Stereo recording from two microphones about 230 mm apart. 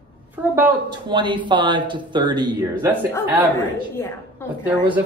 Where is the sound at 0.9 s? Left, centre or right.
Centre.